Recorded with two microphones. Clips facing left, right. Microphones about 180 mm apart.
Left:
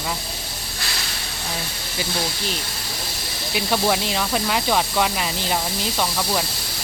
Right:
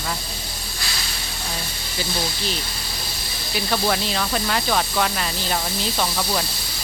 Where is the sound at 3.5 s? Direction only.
10° left (ahead or behind).